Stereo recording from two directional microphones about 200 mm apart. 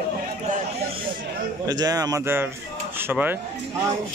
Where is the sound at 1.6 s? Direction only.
20° right (ahead or behind).